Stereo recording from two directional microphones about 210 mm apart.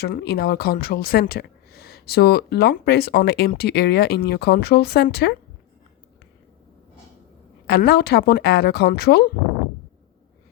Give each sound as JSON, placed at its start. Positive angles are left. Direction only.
{"t": 0.0, "sound": "speech", "side_deg": 50}
{"t": 7.7, "sound": "speech", "side_deg": 50}